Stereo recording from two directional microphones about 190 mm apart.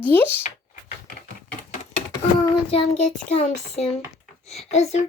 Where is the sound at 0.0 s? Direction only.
10° left (ahead or behind).